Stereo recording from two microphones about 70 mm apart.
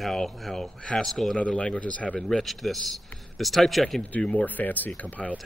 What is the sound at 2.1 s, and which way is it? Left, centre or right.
Speech, centre.